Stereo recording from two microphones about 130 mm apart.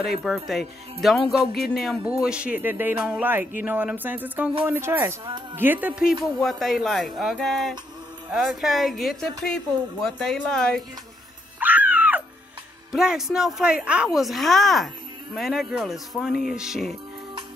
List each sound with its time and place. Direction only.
0.0 s a woman's voice: centre (ahead or behind)
11.6 s a sound: 10° right (ahead or behind)
12.9 s a woman's voice: 5° right (ahead or behind)